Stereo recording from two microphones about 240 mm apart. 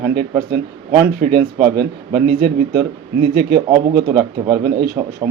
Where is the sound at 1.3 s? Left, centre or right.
Right.